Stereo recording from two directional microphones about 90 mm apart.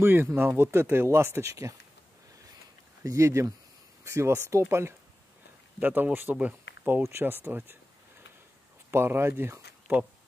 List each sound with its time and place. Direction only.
0.0 s speech: 25° right (ahead or behind)
3.0 s speech: 35° right (ahead or behind)
5.8 s speech: 20° right (ahead or behind)
7.0 s speech: 30° right (ahead or behind)
8.9 s speech: 25° right (ahead or behind)